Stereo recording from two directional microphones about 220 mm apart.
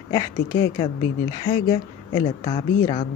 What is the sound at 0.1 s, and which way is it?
Speech, 15° left (ahead or behind).